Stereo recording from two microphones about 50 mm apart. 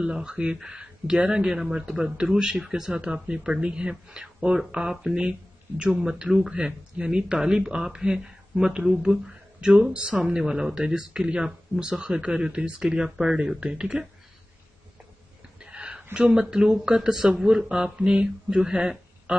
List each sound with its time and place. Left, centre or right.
0.0 s speech: centre
10.2 s speech: centre
15.6 s a sound: centre
16.3 s speech: centre